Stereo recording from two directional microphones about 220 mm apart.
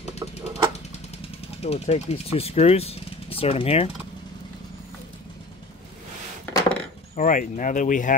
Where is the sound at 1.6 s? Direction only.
30° left (ahead or behind).